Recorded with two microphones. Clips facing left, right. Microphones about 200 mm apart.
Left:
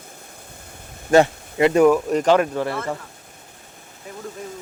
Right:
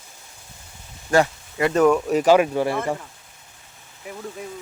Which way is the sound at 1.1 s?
25° left (ahead or behind).